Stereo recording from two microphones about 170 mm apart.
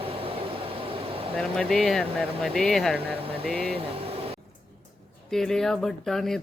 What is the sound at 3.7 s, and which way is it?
Vehicle, 35° right (ahead or behind).